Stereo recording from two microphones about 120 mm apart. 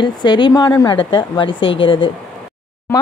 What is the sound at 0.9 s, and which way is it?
A woman's voice, 40° left (ahead or behind).